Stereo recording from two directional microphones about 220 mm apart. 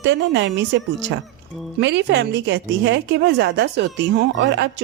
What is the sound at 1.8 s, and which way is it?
A woman's voice, 55° right (ahead or behind).